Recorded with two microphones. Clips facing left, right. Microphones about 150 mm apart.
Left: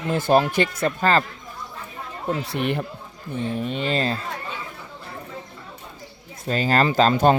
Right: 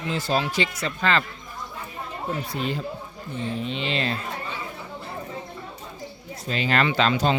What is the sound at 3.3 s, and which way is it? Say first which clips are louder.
Speech: left 3 dB; 50° left (ahead or behind).